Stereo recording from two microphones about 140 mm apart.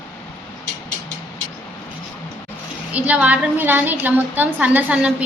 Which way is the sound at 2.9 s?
10° right (ahead or behind).